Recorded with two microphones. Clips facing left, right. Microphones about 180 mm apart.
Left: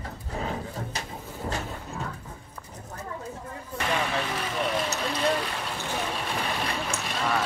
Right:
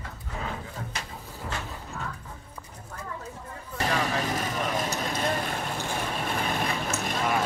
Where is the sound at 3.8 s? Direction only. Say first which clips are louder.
Right 1 dB; 40° right (ahead or behind).